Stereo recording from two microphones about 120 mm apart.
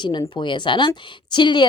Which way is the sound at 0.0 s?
40° left (ahead or behind).